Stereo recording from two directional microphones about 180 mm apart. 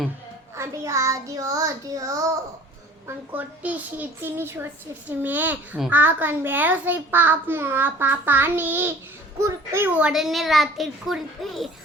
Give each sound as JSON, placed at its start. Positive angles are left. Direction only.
{"t": 0.5, "sound": "a woman's voice", "side_deg": -15}
{"t": 3.3, "sound": "a woman's voice", "side_deg": -10}